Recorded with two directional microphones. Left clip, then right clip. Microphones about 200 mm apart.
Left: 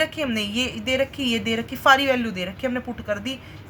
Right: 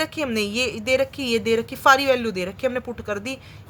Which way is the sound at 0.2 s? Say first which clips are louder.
Right 1 dB; 45° right (ahead or behind).